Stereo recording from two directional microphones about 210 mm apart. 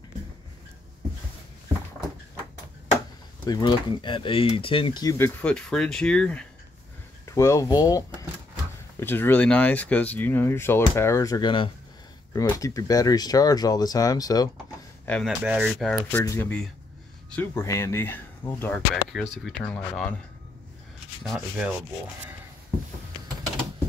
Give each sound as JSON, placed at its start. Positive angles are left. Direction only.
{"t": 3.4, "sound": "speech", "side_deg": 20}
{"t": 15.0, "sound": "speech", "side_deg": 5}
{"t": 21.2, "sound": "speech", "side_deg": 0}